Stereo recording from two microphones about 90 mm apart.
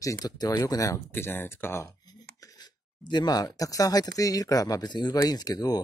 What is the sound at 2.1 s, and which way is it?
Speech, 50° left (ahead or behind).